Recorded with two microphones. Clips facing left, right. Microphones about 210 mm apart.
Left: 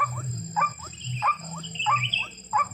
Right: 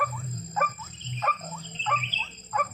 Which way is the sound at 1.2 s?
50° right (ahead or behind).